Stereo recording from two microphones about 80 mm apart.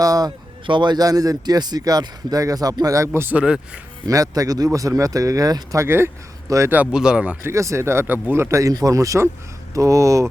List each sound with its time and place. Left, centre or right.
0.0 s speech: right
0.6 s speech: right
3.3 s speech: centre
4.0 s speech: right
5.8 s speech: right
6.5 s speech: right
6.9 s speech: centre
7.4 s speech: right
8.7 s speech: right